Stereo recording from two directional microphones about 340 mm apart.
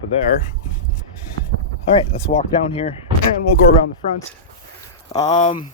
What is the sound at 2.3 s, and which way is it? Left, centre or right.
Speech, centre.